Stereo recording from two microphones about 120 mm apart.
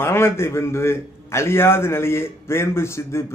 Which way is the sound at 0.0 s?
20° left (ahead or behind).